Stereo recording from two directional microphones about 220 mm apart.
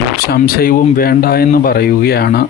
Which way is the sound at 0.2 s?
45° left (ahead or behind).